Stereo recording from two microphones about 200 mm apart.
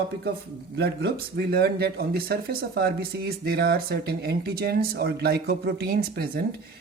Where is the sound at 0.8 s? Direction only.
55° right (ahead or behind).